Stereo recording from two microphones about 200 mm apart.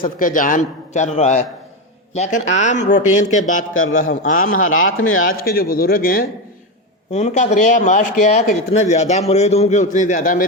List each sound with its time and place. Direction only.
0.0 s speech: 40° left (ahead or behind)
4.6 s speech: 90° left
5.2 s speech: 45° left (ahead or behind)
7.1 s speech: 35° left (ahead or behind)